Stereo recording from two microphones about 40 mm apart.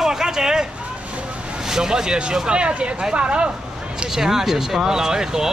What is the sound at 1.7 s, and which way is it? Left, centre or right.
Speech, centre.